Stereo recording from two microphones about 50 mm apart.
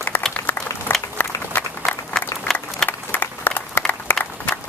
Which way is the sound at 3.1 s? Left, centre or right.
Left.